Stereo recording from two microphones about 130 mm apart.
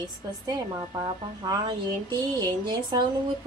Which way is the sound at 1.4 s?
30° right (ahead or behind).